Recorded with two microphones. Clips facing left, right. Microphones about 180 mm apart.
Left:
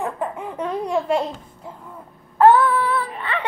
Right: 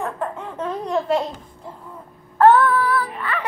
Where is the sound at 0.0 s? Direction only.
15° left (ahead or behind).